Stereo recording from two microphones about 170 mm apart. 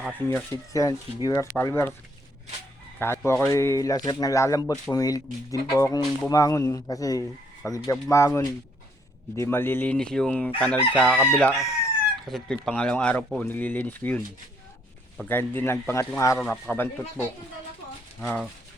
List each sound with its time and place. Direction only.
0.7 s speech: 20° left (ahead or behind)
3.0 s speech: 15° left (ahead or behind)
15.3 s speech: 10° left (ahead or behind)
18.2 s speech: centre (ahead or behind)